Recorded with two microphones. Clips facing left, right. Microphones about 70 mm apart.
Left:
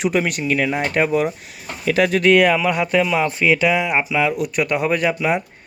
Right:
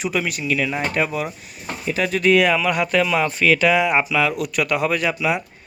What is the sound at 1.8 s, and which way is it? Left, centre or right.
Speech, left.